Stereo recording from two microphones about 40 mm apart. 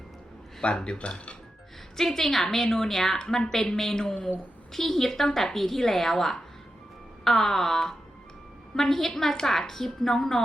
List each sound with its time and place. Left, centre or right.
0.6 s speech: left
2.0 s a woman's voice: centre
3.2 s a woman's voice: centre